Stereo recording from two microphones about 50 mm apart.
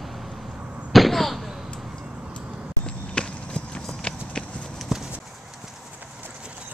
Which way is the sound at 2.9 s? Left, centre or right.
Centre.